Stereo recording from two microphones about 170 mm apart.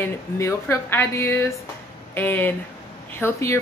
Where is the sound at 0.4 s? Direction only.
15° left (ahead or behind).